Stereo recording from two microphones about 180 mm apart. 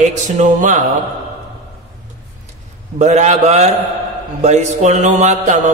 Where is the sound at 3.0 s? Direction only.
40° right (ahead or behind).